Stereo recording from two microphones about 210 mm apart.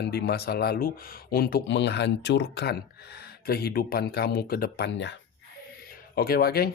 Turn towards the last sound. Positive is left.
turn(degrees=45)  # may be behind; listen again after turning